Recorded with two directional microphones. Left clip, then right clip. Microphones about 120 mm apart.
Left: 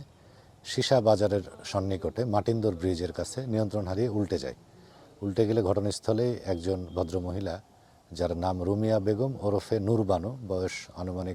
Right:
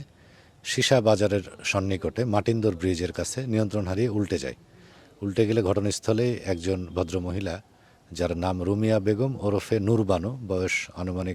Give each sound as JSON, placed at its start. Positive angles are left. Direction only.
{"t": 0.6, "sound": "speech", "side_deg": -25}